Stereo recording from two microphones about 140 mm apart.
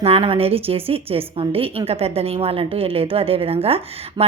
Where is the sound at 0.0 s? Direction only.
45° right (ahead or behind).